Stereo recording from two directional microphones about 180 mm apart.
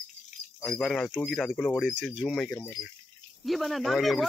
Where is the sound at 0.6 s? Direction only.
Centre (ahead or behind).